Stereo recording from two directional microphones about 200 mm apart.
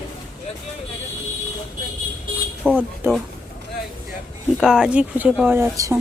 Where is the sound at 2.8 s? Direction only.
10° right (ahead or behind).